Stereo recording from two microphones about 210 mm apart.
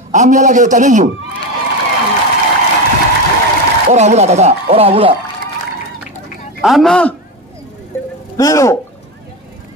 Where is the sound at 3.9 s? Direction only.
35° right (ahead or behind).